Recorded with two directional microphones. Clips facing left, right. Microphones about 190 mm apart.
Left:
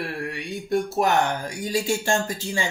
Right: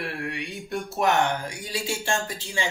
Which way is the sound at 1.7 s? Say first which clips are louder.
Left 5 dB; 40° left (ahead or behind).